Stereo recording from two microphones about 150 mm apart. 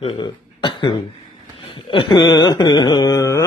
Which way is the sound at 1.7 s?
35° left (ahead or behind).